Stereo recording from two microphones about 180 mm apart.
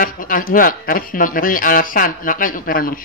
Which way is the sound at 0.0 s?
50° left (ahead or behind).